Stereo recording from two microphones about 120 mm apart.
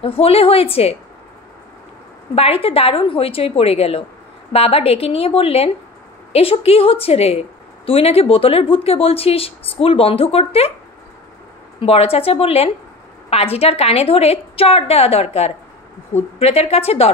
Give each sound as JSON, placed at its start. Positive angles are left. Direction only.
{"t": 0.0, "sound": "speech", "side_deg": 55}
{"t": 2.3, "sound": "a woman's voice", "side_deg": 55}
{"t": 11.8, "sound": "a woman's voice", "side_deg": 55}